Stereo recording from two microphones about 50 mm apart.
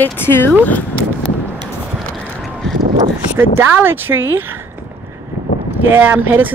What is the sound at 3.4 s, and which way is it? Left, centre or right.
Speech, right.